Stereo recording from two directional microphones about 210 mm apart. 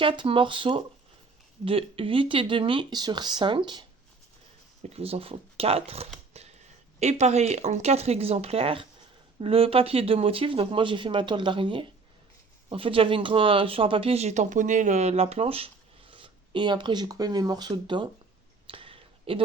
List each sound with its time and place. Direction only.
0.0 s speech: 25° right (ahead or behind)
4.8 s speech: 30° right (ahead or behind)
18.7 s a sound: 25° right (ahead or behind)